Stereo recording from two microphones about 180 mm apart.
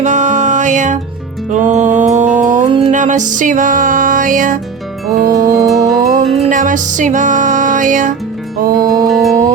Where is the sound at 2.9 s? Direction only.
45° right (ahead or behind).